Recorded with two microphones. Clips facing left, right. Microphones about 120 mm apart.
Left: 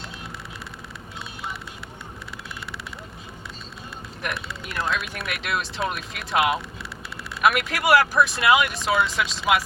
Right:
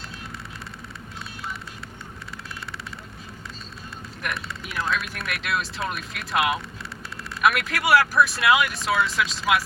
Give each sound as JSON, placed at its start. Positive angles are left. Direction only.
{"t": 4.2, "sound": "speech", "side_deg": 0}